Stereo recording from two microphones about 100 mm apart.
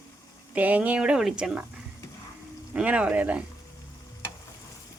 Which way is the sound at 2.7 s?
10° right (ahead or behind).